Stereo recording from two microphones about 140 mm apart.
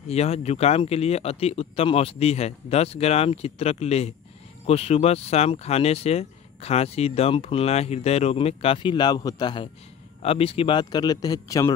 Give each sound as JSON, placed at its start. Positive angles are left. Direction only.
{"t": 0.1, "sound": "speech", "side_deg": 50}
{"t": 10.2, "sound": "speech", "side_deg": 45}